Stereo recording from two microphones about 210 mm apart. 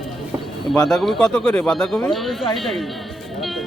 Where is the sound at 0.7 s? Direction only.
Centre (ahead or behind).